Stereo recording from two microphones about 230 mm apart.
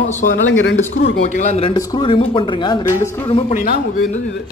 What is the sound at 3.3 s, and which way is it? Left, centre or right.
Speech, left.